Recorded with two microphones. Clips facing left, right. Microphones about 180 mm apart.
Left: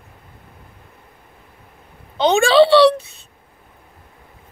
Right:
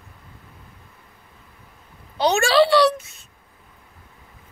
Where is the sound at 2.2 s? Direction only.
30° left (ahead or behind).